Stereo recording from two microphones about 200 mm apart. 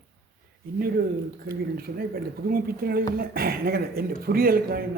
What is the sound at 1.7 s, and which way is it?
Speech, 50° right (ahead or behind).